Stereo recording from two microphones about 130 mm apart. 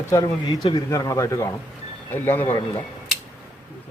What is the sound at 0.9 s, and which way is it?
Speech, 25° left (ahead or behind).